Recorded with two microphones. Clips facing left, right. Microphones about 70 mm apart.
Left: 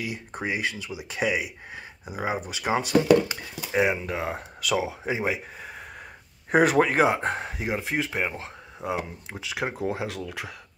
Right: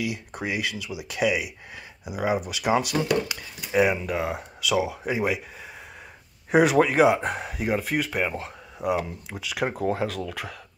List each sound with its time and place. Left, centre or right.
0.0 s speech: left
4.6 s speech: left
4.8 s speech: left
5.6 s a sound: left
6.5 s speech: left
7.6 s speech: centre
10.0 s speech: centre